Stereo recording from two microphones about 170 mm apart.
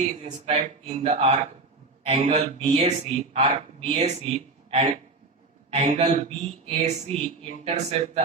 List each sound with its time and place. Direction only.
0.0 s speech: 40° right (ahead or behind)